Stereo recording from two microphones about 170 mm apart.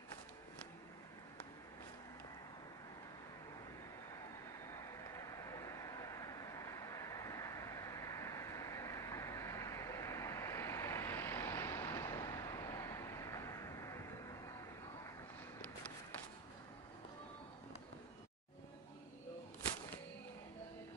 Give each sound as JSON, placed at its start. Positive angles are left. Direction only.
{"t": 4.6, "sound": "vehicle", "side_deg": 15}